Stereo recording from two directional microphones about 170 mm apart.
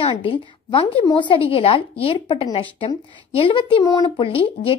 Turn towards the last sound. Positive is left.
turn(degrees=30)  # may be behind; listen again after turning